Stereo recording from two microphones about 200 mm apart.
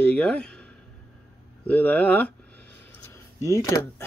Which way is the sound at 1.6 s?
5° left (ahead or behind).